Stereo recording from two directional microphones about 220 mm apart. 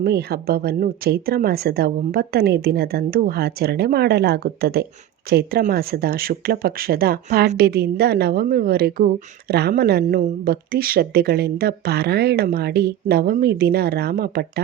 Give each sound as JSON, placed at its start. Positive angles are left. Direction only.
{"t": 0.0, "sound": "speech", "side_deg": -45}